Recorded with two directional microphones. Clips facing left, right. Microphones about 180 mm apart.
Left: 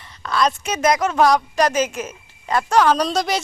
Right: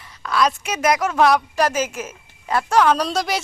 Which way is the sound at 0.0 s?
5° right (ahead or behind).